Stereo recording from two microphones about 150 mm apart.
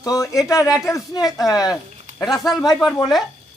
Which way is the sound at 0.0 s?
20° left (ahead or behind).